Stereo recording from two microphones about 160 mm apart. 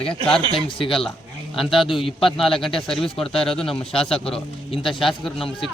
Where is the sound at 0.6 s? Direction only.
35° left (ahead or behind).